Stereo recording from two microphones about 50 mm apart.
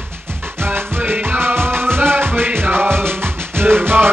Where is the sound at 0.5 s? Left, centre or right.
Right.